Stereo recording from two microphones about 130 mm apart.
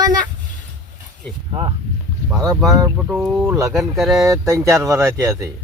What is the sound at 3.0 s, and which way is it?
Speech, 5° right (ahead or behind).